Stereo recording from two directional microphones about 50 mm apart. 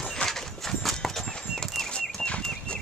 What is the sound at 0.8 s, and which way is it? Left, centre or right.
Clip-clop, centre.